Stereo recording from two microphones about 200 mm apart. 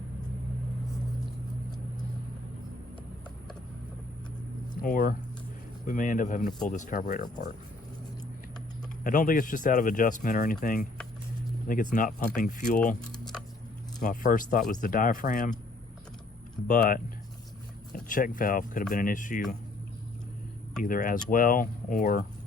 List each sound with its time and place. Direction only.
4.8 s speech: 45° left (ahead or behind)
9.0 s speech: 40° left (ahead or behind)
14.0 s speech: 40° left (ahead or behind)
16.6 s speech: 40° left (ahead or behind)
18.1 s speech: 45° left (ahead or behind)
20.8 s speech: 40° left (ahead or behind)